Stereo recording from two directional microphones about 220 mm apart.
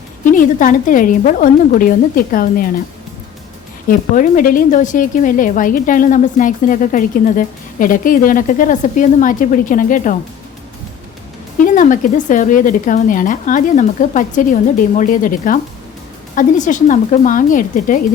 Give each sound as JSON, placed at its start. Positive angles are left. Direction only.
{"t": 0.3, "sound": "a woman's voice", "side_deg": 35}
{"t": 3.8, "sound": "a woman's voice", "side_deg": 35}
{"t": 11.6, "sound": "a woman's voice", "side_deg": 35}